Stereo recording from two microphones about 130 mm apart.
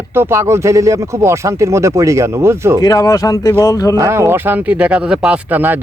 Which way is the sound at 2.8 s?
30° left (ahead or behind).